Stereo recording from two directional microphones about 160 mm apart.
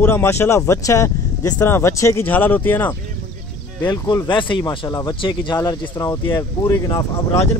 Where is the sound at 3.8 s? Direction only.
25° left (ahead or behind).